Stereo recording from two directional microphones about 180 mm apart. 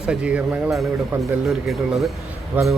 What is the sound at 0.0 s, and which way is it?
A man's voice, 5° right (ahead or behind).